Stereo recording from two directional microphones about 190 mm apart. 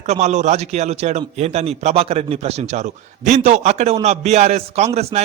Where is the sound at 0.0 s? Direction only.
35° right (ahead or behind).